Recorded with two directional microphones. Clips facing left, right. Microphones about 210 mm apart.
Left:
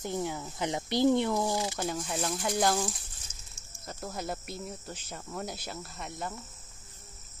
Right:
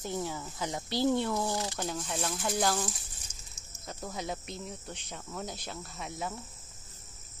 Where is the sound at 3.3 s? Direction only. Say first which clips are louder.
Right 1 dB; 10° right (ahead or behind).